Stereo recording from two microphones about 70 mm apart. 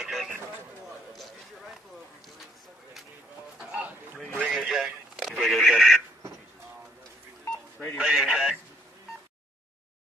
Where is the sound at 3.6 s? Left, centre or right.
Centre.